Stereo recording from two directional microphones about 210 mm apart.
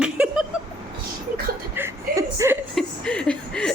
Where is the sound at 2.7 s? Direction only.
5° left (ahead or behind).